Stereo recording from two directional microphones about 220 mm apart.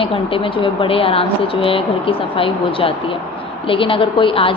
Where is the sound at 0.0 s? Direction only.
25° left (ahead or behind).